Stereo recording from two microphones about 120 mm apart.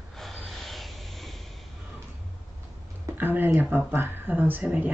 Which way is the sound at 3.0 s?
20° right (ahead or behind).